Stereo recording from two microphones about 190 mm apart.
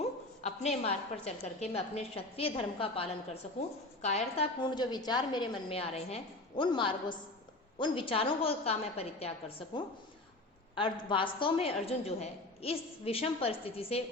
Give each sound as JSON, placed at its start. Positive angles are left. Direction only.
{"t": 0.0, "sound": "a sound", "side_deg": 35}
{"t": 1.2, "sound": "a woman's voice", "side_deg": 35}
{"t": 4.6, "sound": "a woman's voice", "side_deg": 25}